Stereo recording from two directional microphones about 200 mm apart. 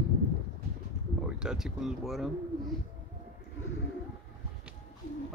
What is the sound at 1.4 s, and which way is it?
Speech, centre (ahead or behind).